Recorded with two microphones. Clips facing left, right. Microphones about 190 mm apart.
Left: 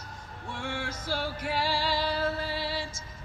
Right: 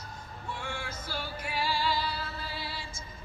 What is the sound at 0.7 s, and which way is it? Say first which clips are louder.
Music: left 5 dB; 90° left.